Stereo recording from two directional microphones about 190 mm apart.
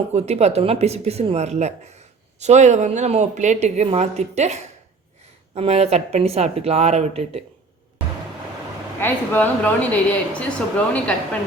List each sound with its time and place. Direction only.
0.1 s speech: 35° right (ahead or behind)
9.0 s speech: 10° left (ahead or behind)